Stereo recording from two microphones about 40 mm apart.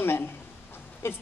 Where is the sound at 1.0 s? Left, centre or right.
Left.